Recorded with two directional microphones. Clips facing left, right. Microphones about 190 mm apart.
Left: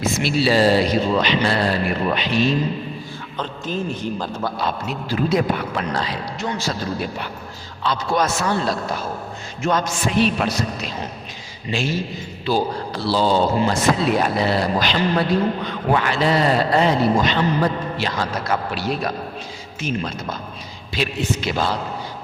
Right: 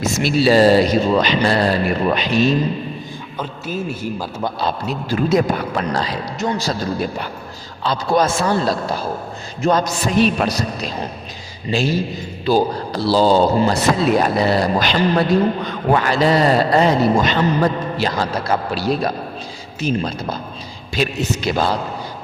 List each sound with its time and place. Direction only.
0.0 s speech: 45° right (ahead or behind)
3.3 s a man's voice: 10° right (ahead or behind)
4.6 s a man's voice: 40° right (ahead or behind)